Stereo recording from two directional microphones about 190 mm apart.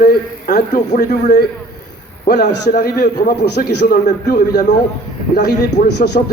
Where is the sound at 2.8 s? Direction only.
60° left (ahead or behind).